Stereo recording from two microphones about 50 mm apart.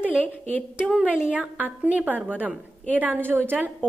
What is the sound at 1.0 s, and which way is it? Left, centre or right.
A woman's voice, right.